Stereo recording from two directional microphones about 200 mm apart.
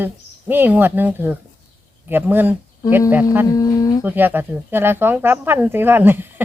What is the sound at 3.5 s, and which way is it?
Speech, 20° left (ahead or behind).